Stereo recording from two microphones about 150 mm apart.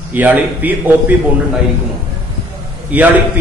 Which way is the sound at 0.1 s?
10° right (ahead or behind).